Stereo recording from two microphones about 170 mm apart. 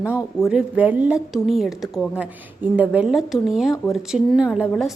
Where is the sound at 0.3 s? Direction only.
5° right (ahead or behind).